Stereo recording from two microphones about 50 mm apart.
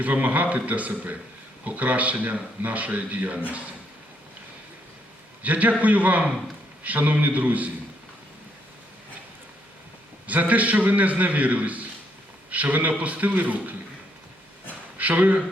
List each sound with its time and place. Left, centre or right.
0.0 s a man's voice: right
5.4 s a man's voice: right
10.2 s a man's voice: right
14.9 s speech: right